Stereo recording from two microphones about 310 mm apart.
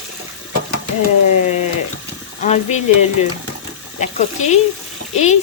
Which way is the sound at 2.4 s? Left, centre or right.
Left.